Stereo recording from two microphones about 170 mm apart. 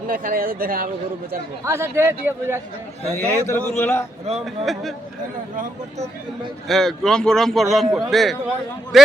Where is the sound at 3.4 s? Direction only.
15° left (ahead or behind).